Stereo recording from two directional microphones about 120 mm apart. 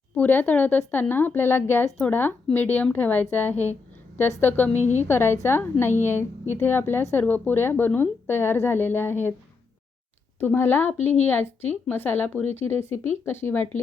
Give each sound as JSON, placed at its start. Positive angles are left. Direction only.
{"t": 0.2, "sound": "a woman's voice", "side_deg": 15}
{"t": 4.8, "sound": "a woman's voice", "side_deg": 75}
{"t": 5.0, "sound": "a woman's voice", "side_deg": 20}
{"t": 10.4, "sound": "a woman's voice", "side_deg": 20}